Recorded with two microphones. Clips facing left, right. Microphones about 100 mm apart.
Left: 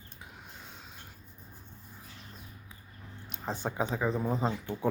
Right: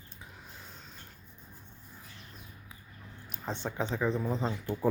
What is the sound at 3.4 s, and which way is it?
Speech, 10° left (ahead or behind).